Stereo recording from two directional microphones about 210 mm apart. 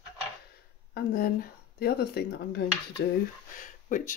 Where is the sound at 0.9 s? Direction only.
45° left (ahead or behind).